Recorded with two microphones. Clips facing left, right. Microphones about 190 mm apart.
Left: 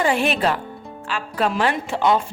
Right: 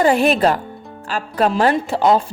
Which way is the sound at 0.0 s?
40° right (ahead or behind).